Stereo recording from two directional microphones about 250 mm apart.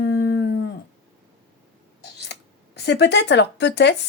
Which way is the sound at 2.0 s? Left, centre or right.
Left.